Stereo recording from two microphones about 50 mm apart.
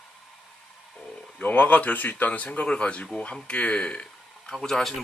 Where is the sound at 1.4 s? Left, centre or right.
Left.